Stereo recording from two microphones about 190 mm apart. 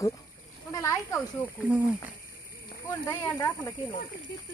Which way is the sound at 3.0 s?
20° left (ahead or behind).